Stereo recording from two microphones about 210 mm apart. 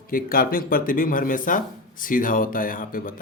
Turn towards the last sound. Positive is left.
turn(degrees=40)  # may be behind; listen again after turning